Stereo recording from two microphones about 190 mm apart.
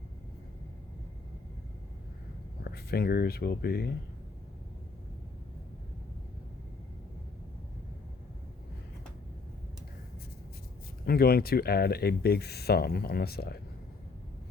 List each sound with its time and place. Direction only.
2.6 s speech: 55° left (ahead or behind)
11.0 s speech: 55° left (ahead or behind)